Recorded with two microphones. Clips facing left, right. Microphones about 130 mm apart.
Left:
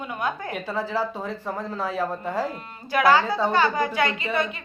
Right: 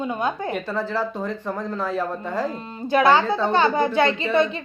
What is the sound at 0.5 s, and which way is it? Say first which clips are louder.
Speech: right 2 dB; 10° left (ahead or behind).